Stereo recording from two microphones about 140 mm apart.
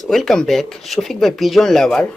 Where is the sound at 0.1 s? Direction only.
5° left (ahead or behind).